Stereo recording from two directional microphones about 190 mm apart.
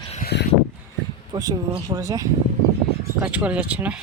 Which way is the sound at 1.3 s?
20° right (ahead or behind).